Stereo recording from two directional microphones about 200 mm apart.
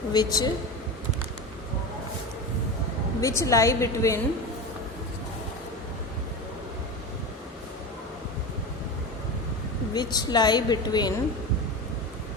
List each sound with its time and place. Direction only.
0.1 s a woman's voice: 20° left (ahead or behind)
3.2 s a woman's voice: 15° left (ahead or behind)
9.9 s a woman's voice: 20° left (ahead or behind)